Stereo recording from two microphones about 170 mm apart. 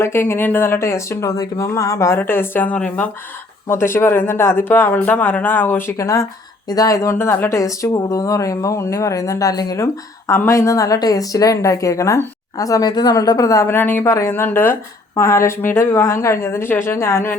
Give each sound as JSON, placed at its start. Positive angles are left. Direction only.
{"t": 0.0, "sound": "speech", "side_deg": 15}